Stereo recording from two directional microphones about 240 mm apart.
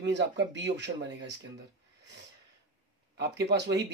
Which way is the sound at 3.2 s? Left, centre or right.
Right.